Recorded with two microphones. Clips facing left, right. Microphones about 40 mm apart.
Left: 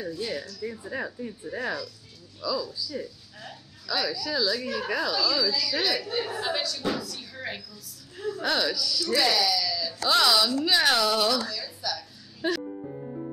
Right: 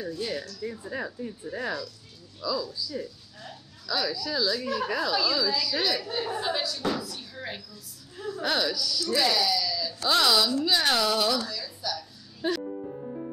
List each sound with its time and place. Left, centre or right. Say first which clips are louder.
0.2 s a woman's voice: even; centre
5.1 s a woman's voice: right 1 dB; centre
5.7 s a woman's voice: left 1 dB; centre
7.2 s speech: left 2 dB; centre
8.4 s a woman's voice: even; centre